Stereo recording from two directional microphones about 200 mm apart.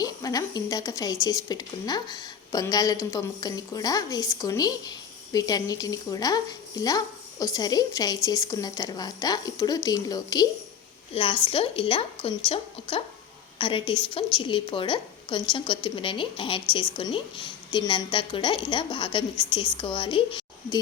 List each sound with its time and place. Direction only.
0.0 s speech: 20° left (ahead or behind)
13.6 s speech: 25° left (ahead or behind)